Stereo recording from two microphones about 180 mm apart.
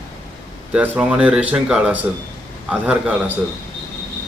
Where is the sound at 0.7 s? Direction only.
5° right (ahead or behind).